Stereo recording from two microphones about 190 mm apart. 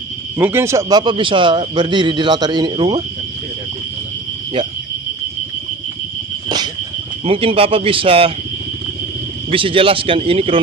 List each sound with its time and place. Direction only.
0.3 s a man's voice: 10° right (ahead or behind)
7.3 s a man's voice: 30° right (ahead or behind)
9.5 s a man's voice: 30° right (ahead or behind)